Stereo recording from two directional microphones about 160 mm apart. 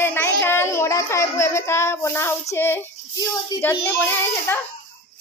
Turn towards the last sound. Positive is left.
turn(degrees=15)  # may be behind; listen again after turning